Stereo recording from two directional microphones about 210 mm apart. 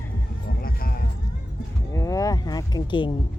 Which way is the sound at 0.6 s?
45° left (ahead or behind).